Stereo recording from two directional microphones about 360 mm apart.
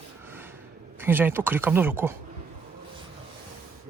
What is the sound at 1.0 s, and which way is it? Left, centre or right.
Speech, centre.